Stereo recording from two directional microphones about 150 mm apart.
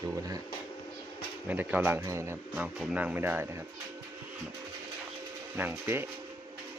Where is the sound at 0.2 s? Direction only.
25° right (ahead or behind).